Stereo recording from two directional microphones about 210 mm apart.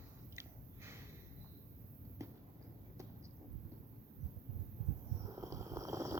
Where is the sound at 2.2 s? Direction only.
15° right (ahead or behind).